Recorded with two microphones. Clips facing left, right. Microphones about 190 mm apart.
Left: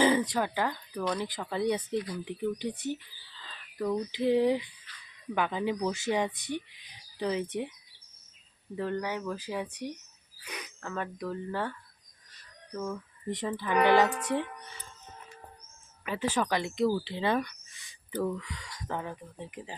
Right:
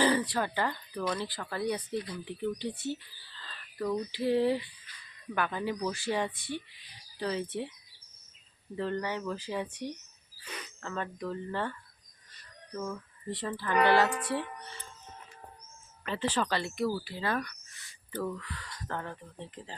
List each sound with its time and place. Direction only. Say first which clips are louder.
0.0 s speech: left 2 dB; 20° left (ahead or behind)
8.7 s speech: left 1 dB; 10° left (ahead or behind)
10.4 s a sound: left 1 dB; 15° left (ahead or behind)
10.8 s speech: left 1 dB; 10° left (ahead or behind)
13.2 s speech: left 2 dB; 15° left (ahead or behind)
16.0 s speech: left 1 dB; 10° left (ahead or behind)